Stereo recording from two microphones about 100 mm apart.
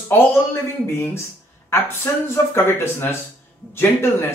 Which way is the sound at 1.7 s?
25° left (ahead or behind).